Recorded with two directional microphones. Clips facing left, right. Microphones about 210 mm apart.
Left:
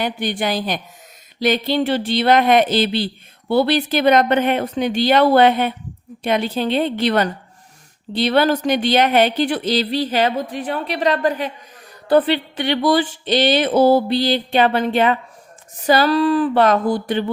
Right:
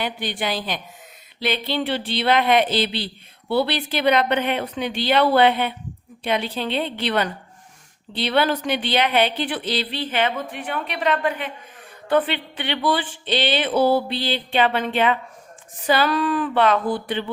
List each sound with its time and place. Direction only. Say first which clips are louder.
0.0 s speech: left 5 dB; 45° left (ahead or behind)